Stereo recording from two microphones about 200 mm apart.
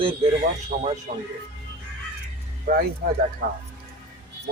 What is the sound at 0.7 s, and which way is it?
Speech, 45° right (ahead or behind).